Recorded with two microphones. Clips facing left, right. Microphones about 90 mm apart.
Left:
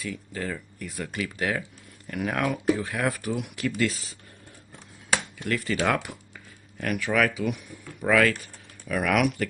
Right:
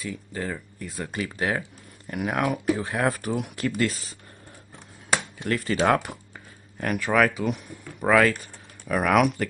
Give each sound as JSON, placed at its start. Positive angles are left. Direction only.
{"t": 0.0, "sound": "speech", "side_deg": -25}
{"t": 2.0, "sound": "speech", "side_deg": -20}
{"t": 2.8, "sound": "speech", "side_deg": -35}
{"t": 5.4, "sound": "speech", "side_deg": -30}